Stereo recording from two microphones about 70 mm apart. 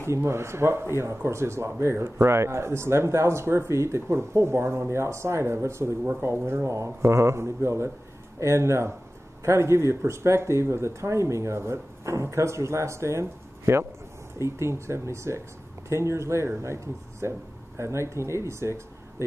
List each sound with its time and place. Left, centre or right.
0.0 s speech: right